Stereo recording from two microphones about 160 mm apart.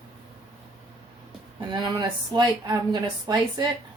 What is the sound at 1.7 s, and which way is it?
Speech, 25° right (ahead or behind).